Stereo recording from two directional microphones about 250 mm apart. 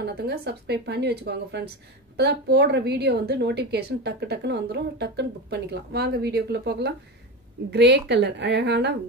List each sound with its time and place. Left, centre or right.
0.0 s a woman's voice: right